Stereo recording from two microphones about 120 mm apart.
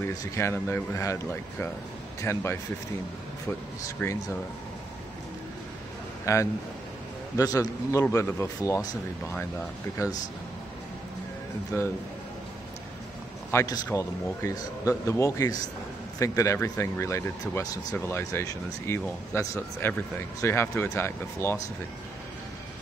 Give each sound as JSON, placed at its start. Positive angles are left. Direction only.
{"t": 0.0, "sound": "speech", "side_deg": 25}
{"t": 3.8, "sound": "speech", "side_deg": 25}
{"t": 6.2, "sound": "speech", "side_deg": 25}
{"t": 10.0, "sound": "speech", "side_deg": 25}
{"t": 11.7, "sound": "speech", "side_deg": 25}
{"t": 13.5, "sound": "speech", "side_deg": 25}